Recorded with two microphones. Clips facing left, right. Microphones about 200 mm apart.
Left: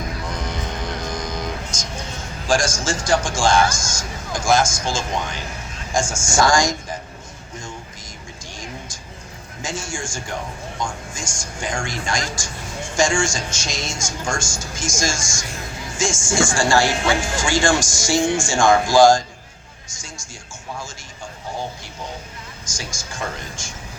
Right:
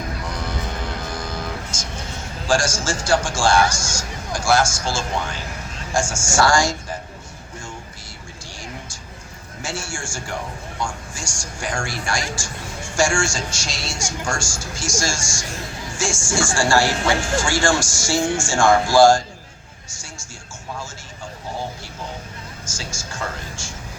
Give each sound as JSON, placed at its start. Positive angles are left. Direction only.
{"t": 0.4, "sound": "music", "side_deg": 20}
{"t": 2.5, "sound": "speech", "side_deg": 20}
{"t": 9.6, "sound": "a man's voice", "side_deg": 20}
{"t": 19.9, "sound": "music", "side_deg": 15}
{"t": 22.6, "sound": "speech", "side_deg": 15}